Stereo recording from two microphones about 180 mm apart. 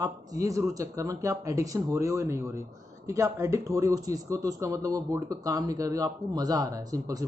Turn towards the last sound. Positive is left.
turn(degrees=-20)  # may be behind; listen again after turning